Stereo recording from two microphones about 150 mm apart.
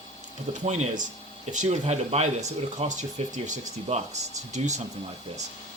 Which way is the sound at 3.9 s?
40° right (ahead or behind).